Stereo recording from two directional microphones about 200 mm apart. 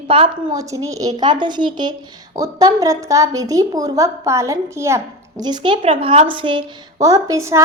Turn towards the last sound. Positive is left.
turn(degrees=-15)  # may be behind; listen again after turning